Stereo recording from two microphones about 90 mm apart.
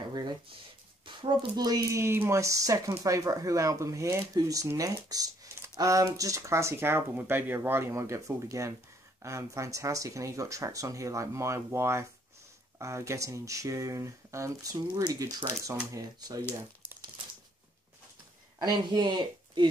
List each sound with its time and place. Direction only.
0.0 s a sound: 55° right (ahead or behind)
1.0 s speech: 60° right (ahead or behind)
1.9 s speech: 30° right (ahead or behind)
15.9 s speech: 45° right (ahead or behind)
18.6 s speech: 50° right (ahead or behind)